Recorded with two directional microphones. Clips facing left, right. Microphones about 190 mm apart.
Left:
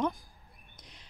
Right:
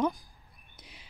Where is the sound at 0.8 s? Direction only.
5° right (ahead or behind).